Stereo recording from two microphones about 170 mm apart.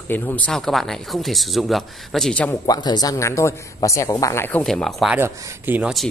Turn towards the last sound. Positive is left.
turn(degrees=-10)  # may be behind; listen again after turning